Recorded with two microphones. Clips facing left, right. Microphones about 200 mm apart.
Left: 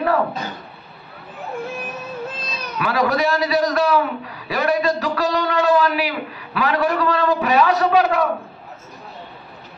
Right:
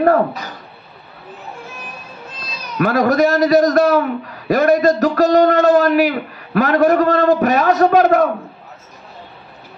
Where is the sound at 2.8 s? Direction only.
45° right (ahead or behind).